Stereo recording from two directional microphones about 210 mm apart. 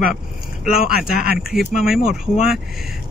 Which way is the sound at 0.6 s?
5° right (ahead or behind).